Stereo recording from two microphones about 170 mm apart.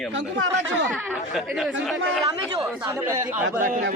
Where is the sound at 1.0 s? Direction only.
5° right (ahead or behind).